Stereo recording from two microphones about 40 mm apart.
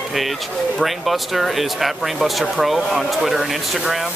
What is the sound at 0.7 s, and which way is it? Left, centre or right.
Speech, centre.